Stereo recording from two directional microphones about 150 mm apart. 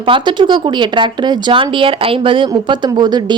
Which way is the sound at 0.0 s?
35° right (ahead or behind).